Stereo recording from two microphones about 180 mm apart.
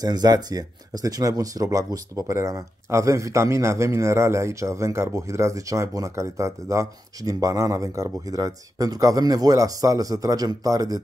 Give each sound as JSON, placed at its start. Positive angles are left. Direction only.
{"t": 0.0, "sound": "speech", "side_deg": -20}